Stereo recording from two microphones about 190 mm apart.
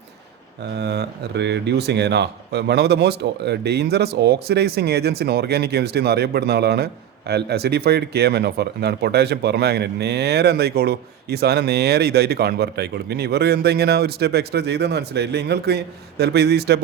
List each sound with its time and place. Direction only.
0.6 s speech: 60° right (ahead or behind)